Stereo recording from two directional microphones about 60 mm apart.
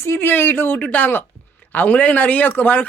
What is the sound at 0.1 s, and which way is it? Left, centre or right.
Speech, left.